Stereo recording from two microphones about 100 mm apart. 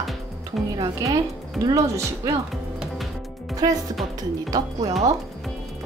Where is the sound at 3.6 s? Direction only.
40° right (ahead or behind).